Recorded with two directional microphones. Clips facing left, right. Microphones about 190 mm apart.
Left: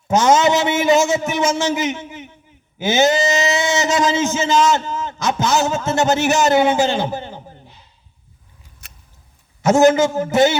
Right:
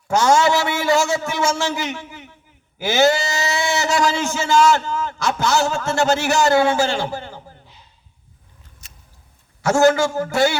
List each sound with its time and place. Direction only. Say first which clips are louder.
0.1 s a man's voice: left 2 dB; 20° left (ahead or behind)
8.8 s a sound: left 4 dB; 60° left (ahead or behind)
9.6 s a man's voice: left 3 dB; 20° left (ahead or behind)